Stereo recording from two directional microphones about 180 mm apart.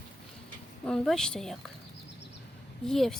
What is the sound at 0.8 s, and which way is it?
Speech, centre (ahead or behind).